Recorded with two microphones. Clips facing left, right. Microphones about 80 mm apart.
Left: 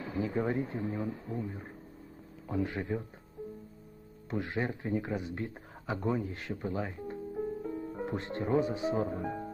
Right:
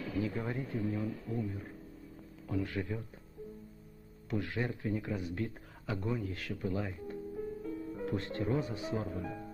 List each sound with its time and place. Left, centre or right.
0.0 s a sound: left
0.4 s speech: left
4.3 s a man's voice: left